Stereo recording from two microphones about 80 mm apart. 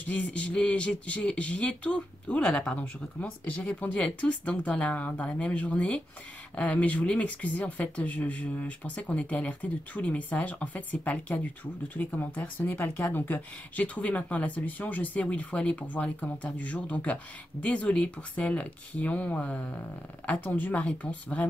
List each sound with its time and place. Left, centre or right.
0.0 s speech: centre